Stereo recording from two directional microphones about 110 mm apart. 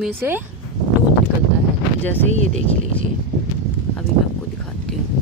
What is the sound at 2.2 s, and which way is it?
Speech, 90° right.